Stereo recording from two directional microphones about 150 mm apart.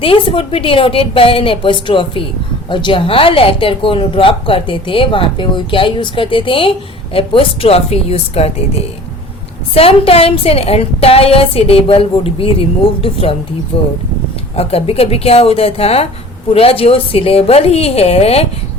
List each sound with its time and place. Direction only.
0.0 s speech: 35° left (ahead or behind)
9.7 s speech: 40° left (ahead or behind)
14.5 s speech: 40° left (ahead or behind)